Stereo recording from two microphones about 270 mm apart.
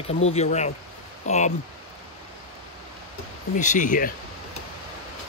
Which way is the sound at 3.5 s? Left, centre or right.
Left.